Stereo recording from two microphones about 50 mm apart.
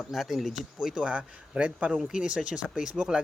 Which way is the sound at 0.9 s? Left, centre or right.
Right.